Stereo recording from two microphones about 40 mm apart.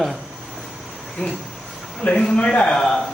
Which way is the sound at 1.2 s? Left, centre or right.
Left.